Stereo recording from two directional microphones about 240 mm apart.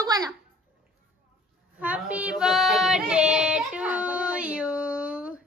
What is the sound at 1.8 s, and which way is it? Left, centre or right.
Female singing, centre.